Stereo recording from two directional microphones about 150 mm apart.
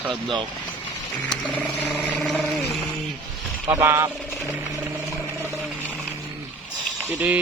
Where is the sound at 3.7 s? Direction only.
20° right (ahead or behind).